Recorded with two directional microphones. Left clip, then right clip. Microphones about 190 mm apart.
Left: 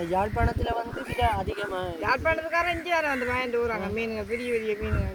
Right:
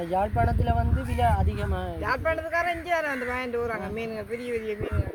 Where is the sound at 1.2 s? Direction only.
15° right (ahead or behind).